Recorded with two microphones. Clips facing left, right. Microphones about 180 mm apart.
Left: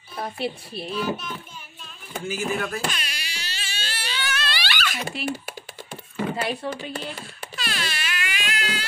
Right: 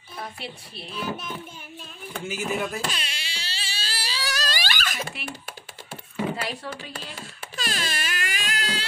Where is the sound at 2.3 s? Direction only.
20° right (ahead or behind); by 4.9 s 45° right (ahead or behind).